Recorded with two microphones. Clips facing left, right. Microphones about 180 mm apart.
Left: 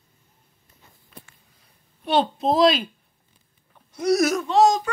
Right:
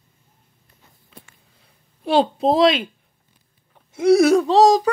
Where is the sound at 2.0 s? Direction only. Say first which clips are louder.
Right 4 dB; 30° right (ahead or behind).